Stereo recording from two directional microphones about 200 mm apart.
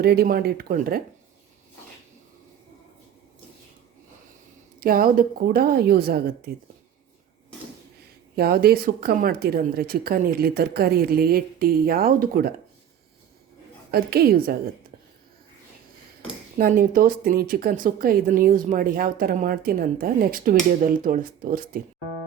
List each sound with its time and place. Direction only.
0.0 s speech: 50° right (ahead or behind)
4.8 s speech: 45° right (ahead or behind)
8.4 s speech: 50° right (ahead or behind)
13.9 s speech: 50° right (ahead or behind)
16.6 s speech: 45° right (ahead or behind)